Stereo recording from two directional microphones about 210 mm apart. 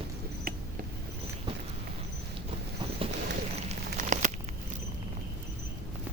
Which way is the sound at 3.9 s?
35° right (ahead or behind).